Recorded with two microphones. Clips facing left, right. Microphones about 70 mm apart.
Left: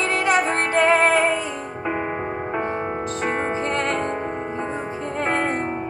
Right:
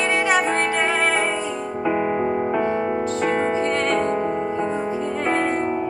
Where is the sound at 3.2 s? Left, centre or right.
Left.